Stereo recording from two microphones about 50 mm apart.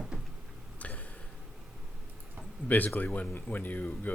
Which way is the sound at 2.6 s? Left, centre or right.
Left.